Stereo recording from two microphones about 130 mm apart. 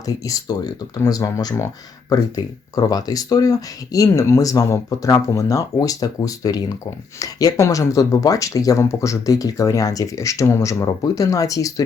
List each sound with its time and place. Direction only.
0.0 s speech: 30° left (ahead or behind)